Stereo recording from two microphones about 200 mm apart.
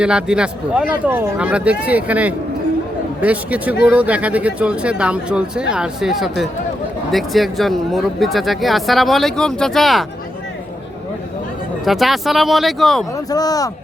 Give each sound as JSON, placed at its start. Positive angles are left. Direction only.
{"t": 0.0, "sound": "speech", "side_deg": -5}
{"t": 11.9, "sound": "speech", "side_deg": 0}
{"t": 13.1, "sound": "speech", "side_deg": 20}